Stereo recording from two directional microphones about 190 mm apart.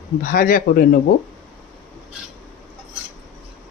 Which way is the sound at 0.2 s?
50° left (ahead or behind).